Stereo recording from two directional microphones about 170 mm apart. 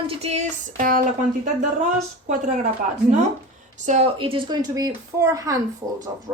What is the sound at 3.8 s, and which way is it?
Speech, 45° right (ahead or behind).